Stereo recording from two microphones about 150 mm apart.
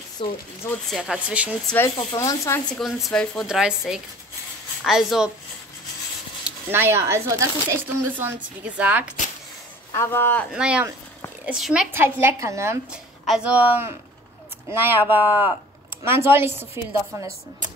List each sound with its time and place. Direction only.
0.2 s speech: 35° left (ahead or behind)
0.8 s speech: centre (ahead or behind)
2.0 s speech: 20° left (ahead or behind)
2.8 s speech: centre (ahead or behind)
6.4 s speech: 15° right (ahead or behind)
9.9 s speech: 15° left (ahead or behind)
10.5 s speech: 5° right (ahead or behind)
11.9 s speech: 15° right (ahead or behind)
12.9 s speech: 5° right (ahead or behind)